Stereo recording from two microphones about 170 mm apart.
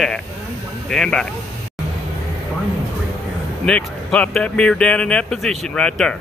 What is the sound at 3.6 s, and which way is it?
Speech, 5° left (ahead or behind).